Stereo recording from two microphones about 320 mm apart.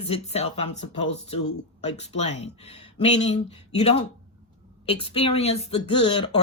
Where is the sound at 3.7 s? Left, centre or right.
Centre.